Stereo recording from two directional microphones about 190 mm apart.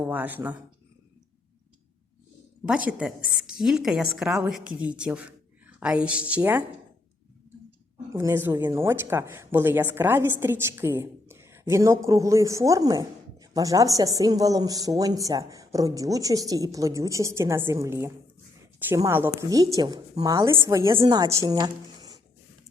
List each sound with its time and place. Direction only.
0.0 s a woman's voice: 10° right (ahead or behind)
2.6 s a woman's voice: 5° right (ahead or behind)
8.1 s a woman's voice: 15° right (ahead or behind)